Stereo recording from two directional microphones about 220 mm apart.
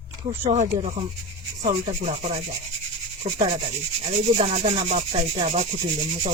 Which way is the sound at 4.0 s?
30° right (ahead or behind).